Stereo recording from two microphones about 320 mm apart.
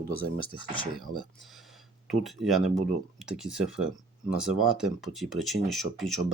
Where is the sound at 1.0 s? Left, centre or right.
Centre.